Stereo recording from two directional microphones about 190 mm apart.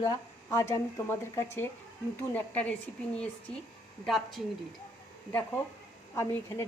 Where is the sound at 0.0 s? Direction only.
15° left (ahead or behind).